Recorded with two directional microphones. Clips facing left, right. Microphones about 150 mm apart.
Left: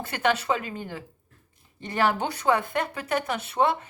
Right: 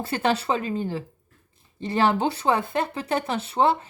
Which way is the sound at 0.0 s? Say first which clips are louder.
Right 2 dB; 30° right (ahead or behind).